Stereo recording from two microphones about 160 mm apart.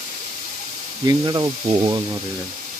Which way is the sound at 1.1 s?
25° right (ahead or behind).